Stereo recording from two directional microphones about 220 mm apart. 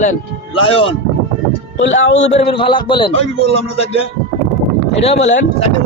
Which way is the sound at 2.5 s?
20° left (ahead or behind).